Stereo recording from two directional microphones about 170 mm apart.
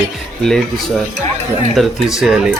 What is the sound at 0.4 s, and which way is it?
Speech, 5° left (ahead or behind).